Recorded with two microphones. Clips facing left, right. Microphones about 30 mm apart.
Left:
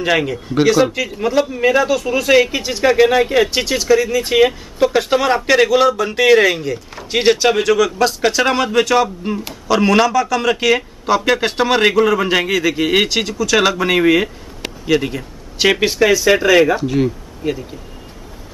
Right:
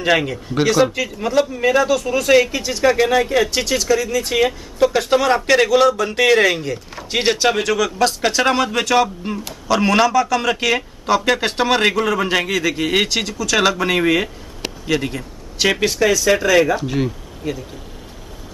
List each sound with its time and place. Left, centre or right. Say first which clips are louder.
0.0 s a man's voice: left 1 dB; centre
16.8 s speech: left 4 dB; centre
17.4 s speech: left 4 dB; left